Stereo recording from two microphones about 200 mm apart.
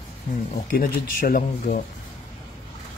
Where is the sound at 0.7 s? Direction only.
45° left (ahead or behind).